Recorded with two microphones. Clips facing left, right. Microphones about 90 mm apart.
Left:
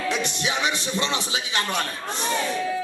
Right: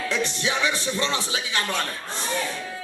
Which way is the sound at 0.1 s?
20° left (ahead or behind).